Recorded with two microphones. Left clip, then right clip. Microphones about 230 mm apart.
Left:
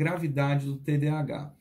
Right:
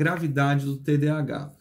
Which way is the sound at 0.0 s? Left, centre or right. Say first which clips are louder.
Right 5 dB; centre.